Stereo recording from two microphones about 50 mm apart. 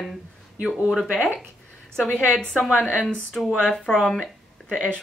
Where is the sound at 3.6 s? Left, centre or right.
Centre.